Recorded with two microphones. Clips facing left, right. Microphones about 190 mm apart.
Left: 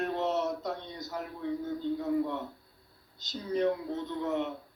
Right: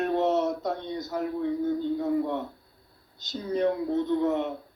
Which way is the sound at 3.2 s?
55° right (ahead or behind).